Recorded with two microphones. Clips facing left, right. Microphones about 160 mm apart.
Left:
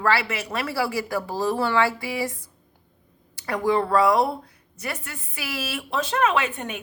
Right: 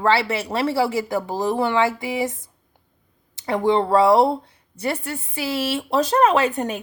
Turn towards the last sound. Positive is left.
turn(degrees=-35)  # may be behind; listen again after turning